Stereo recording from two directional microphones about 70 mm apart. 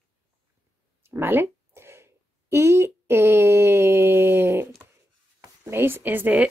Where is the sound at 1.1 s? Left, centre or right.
Right.